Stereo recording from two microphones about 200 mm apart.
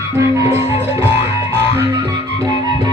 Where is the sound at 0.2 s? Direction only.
15° right (ahead or behind).